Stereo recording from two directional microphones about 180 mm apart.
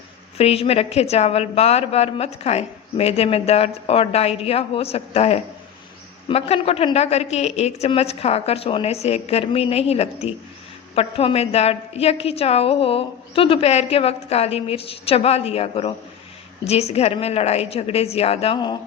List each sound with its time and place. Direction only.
0.3 s a woman's voice: 35° left (ahead or behind)